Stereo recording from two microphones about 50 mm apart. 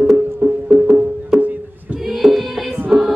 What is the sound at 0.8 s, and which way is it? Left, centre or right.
Music, centre.